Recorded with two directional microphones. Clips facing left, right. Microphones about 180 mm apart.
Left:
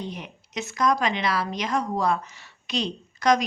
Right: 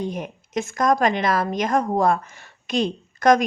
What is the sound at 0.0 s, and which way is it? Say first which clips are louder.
A woman's voice: right 7 dB; 45° right (ahead or behind).